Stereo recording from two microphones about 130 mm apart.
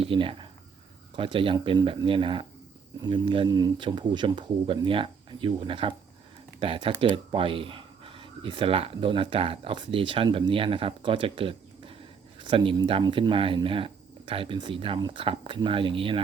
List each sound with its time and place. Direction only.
0.0 s speech: 45° right (ahead or behind)